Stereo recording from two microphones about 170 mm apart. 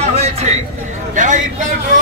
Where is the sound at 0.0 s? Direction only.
40° right (ahead or behind).